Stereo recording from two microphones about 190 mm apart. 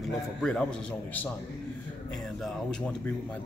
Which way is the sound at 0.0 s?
5° left (ahead or behind).